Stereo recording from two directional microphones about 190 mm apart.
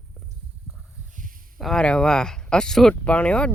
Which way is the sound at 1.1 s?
45° right (ahead or behind).